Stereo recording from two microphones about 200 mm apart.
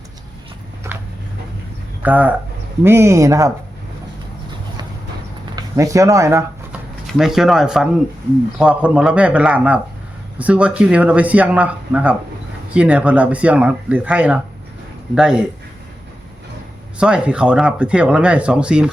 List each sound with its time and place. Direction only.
2.0 s speech: 10° right (ahead or behind)
5.5 s speech: 15° right (ahead or behind)
7.1 s speech: centre (ahead or behind)
17.0 s speech: 5° right (ahead or behind)